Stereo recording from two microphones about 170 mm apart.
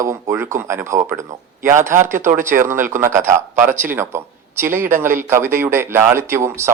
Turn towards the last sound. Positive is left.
turn(degrees=-15)  # may be behind; listen again after turning